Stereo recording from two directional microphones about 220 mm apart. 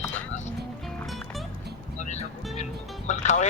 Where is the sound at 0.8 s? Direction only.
Centre (ahead or behind).